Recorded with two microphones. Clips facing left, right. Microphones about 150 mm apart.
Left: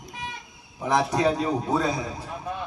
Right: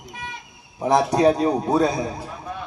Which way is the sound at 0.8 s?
35° right (ahead or behind).